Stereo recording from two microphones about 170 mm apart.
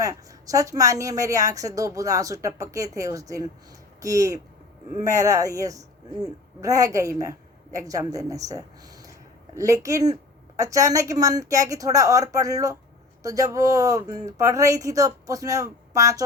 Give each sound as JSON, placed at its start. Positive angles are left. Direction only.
{"t": 0.0, "sound": "a woman's voice", "side_deg": -20}